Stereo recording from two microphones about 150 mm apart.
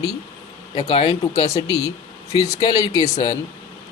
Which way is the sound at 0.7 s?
45° left (ahead or behind).